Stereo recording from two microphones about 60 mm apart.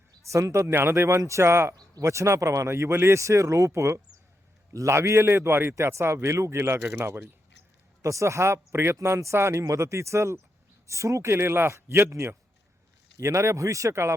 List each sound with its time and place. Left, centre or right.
0.3 s speech: right
0.8 s speech: right
5.7 s speech: right
8.0 s speech: right